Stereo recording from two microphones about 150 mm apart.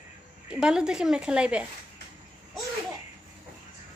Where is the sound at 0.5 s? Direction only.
5° right (ahead or behind).